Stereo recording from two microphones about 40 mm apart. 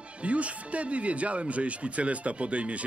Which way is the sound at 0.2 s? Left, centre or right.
Right.